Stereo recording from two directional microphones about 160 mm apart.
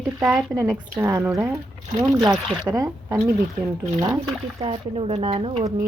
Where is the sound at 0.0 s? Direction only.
20° right (ahead or behind).